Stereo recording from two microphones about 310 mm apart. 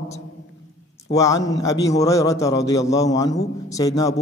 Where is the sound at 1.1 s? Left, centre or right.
Centre.